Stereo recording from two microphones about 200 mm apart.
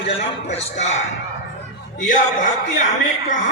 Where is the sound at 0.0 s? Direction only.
35° left (ahead or behind).